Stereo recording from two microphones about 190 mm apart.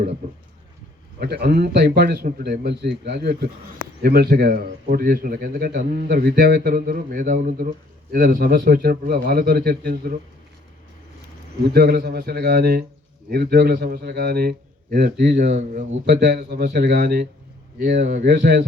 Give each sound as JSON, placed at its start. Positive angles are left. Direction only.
{"t": 1.2, "sound": "a man's voice", "side_deg": -55}
{"t": 11.6, "sound": "a man's voice", "side_deg": -55}